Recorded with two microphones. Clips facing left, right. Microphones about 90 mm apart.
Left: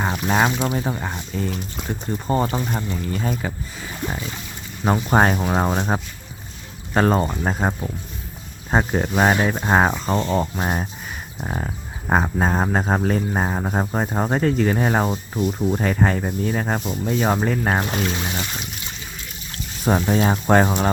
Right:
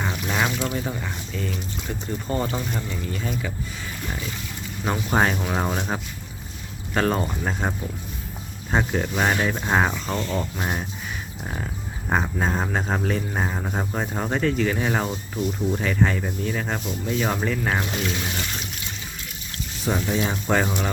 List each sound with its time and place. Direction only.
0.0 s boat: 40° left (ahead or behind)
0.5 s speech: 25° left (ahead or behind)
0.9 s speech: 40° left (ahead or behind)
4.9 s speech: 40° left (ahead or behind)
5.5 s speech: 30° left (ahead or behind)
19.8 s speech: 45° left (ahead or behind)